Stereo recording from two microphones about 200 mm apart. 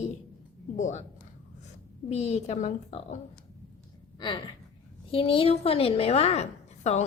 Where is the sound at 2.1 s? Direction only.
35° left (ahead or behind).